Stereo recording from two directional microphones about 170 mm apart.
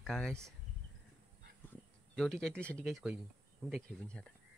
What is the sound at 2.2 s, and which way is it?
Speech, 5° left (ahead or behind).